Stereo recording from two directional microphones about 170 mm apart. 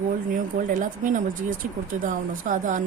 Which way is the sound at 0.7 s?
50° right (ahead or behind).